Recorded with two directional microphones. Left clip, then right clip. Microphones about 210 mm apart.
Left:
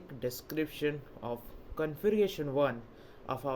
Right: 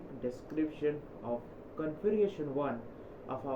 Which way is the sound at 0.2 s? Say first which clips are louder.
Left 1 dB; 85° left.